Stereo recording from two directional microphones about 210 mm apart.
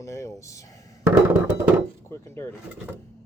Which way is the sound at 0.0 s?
15° left (ahead or behind).